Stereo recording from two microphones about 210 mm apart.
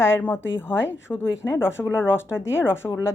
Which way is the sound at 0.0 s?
10° left (ahead or behind).